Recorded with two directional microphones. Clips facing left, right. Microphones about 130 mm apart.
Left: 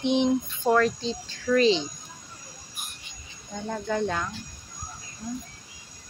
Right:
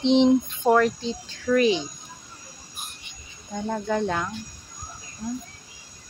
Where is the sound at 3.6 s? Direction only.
10° right (ahead or behind).